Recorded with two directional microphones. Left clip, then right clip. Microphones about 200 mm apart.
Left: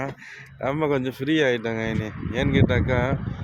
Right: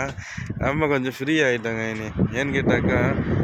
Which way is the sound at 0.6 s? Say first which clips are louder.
Right 2 dB; centre (ahead or behind).